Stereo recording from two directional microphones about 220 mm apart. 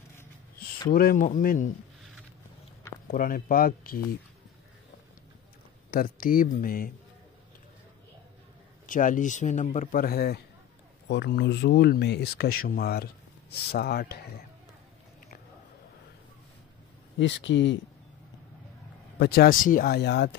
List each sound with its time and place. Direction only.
0.9 s speech: 40° left (ahead or behind)
3.1 s speech: 40° left (ahead or behind)
5.9 s speech: 40° left (ahead or behind)
8.8 s speech: 35° left (ahead or behind)
17.2 s speech: 55° left (ahead or behind)
19.1 s speech: 50° left (ahead or behind)